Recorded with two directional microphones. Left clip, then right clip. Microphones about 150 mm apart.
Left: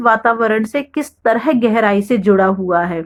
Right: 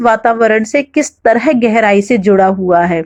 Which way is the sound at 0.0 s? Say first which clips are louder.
Right 3 dB; 25° right (ahead or behind).